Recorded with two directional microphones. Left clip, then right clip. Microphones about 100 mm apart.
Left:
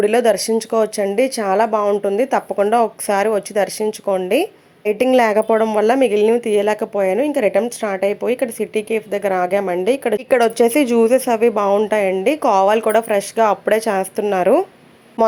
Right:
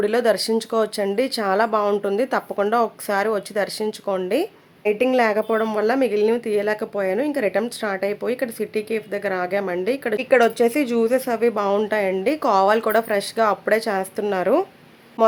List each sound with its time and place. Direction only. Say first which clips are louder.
0.0 s speech: left 4 dB; 30° left (ahead or behind)
2.7 s speech: left 4 dB; 30° left (ahead or behind)
4.0 s speech: left 5 dB; 10° left (ahead or behind)
5.1 s a woman's voice: left 5 dB; 50° left (ahead or behind); by 10.2 s 25° left (ahead or behind)
10.2 s speech: even; 55° left (ahead or behind); by 14.3 s 35° left (ahead or behind)